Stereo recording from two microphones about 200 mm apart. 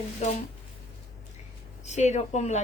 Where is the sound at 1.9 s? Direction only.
35° left (ahead or behind).